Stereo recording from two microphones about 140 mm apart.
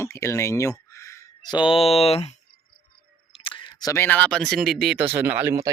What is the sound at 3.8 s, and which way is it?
Speech, 20° left (ahead or behind).